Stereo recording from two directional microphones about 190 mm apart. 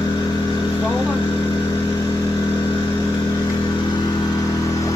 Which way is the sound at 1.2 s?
25° left (ahead or behind).